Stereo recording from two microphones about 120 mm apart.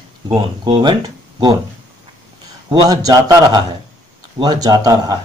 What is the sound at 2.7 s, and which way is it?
Speech, 30° right (ahead or behind).